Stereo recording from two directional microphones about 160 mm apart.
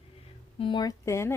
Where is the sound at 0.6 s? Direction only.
25° left (ahead or behind).